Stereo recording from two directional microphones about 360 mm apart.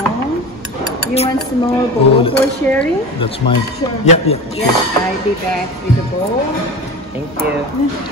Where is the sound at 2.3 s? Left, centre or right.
Centre.